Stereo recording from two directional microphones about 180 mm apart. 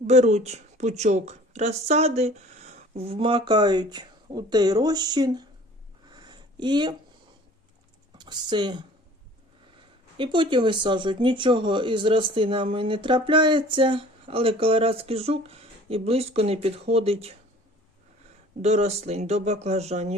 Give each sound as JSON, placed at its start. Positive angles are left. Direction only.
{"t": 0.1, "sound": "a woman's voice", "side_deg": -40}
{"t": 6.1, "sound": "a sound", "side_deg": -25}
{"t": 8.2, "sound": "speech", "side_deg": -25}
{"t": 10.2, "sound": "speech", "side_deg": -25}
{"t": 18.6, "sound": "a woman's voice", "side_deg": -35}